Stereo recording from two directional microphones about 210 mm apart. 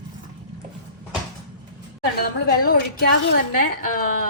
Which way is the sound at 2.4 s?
45° left (ahead or behind).